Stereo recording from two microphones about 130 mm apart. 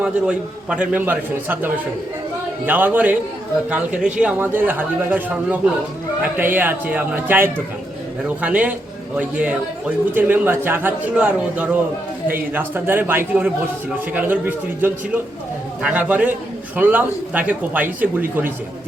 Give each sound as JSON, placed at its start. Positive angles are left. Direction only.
{"t": 0.0, "sound": "a man's voice", "side_deg": -10}